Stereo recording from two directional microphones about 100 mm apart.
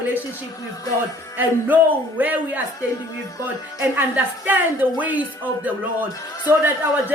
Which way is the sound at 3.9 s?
20° right (ahead or behind).